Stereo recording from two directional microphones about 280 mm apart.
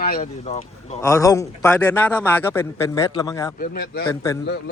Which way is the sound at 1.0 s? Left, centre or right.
Centre.